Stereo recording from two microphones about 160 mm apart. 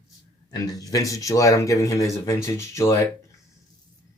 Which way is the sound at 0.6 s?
20° left (ahead or behind).